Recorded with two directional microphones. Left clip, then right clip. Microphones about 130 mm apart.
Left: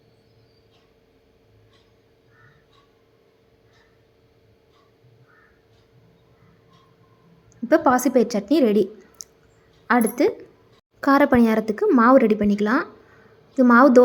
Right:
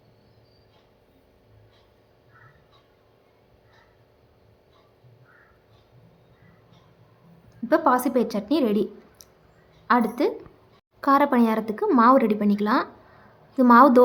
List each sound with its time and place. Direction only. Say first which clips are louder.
7.7 s a woman's voice: left 3 dB; 35° left (ahead or behind)
9.2 s a sound: left 9 dB; 30° left (ahead or behind)
9.8 s a woman's voice: left 2 dB; 35° left (ahead or behind)